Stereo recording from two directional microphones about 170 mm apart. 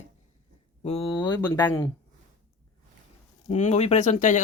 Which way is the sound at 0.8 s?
35° left (ahead or behind).